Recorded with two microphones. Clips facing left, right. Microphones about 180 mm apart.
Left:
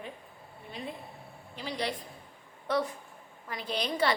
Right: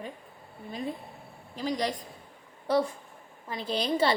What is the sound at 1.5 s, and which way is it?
Speech, 40° right (ahead or behind).